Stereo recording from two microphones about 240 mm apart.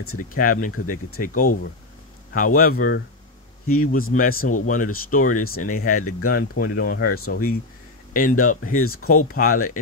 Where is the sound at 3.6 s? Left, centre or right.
Left.